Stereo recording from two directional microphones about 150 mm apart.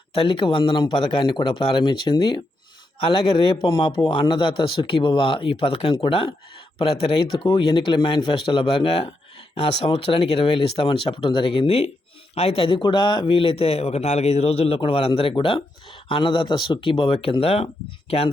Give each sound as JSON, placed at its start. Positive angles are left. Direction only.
{"t": 0.1, "sound": "speech", "side_deg": 35}